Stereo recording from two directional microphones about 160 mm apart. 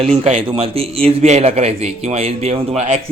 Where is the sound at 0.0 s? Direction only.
40° right (ahead or behind).